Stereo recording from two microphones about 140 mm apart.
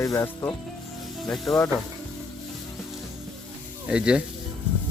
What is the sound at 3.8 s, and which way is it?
Speech, 5° right (ahead or behind).